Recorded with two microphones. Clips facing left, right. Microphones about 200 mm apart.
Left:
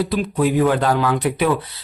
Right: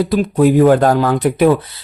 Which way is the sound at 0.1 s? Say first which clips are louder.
Right 6 dB; 45° right (ahead or behind).